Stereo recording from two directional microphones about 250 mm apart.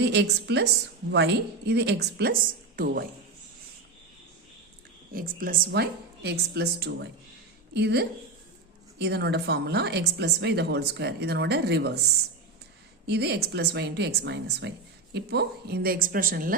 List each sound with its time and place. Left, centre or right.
0.0 s a woman's voice: right
5.1 s a woman's voice: right
13.1 s a woman's voice: right